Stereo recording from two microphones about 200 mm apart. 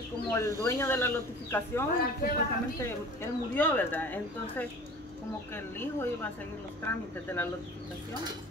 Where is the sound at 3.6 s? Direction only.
10° left (ahead or behind).